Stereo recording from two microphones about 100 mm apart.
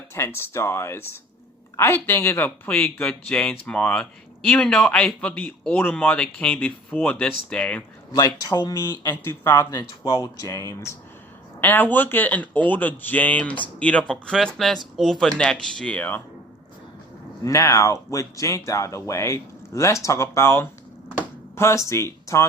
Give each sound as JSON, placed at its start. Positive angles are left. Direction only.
{"t": 0.1, "sound": "a man's voice", "side_deg": 25}
{"t": 8.1, "sound": "speech", "side_deg": 40}
{"t": 9.2, "sound": "speech", "side_deg": 25}
{"t": 9.6, "sound": "speech", "side_deg": 40}
{"t": 11.6, "sound": "a man's voice", "side_deg": 20}
{"t": 17.4, "sound": "speech", "side_deg": 30}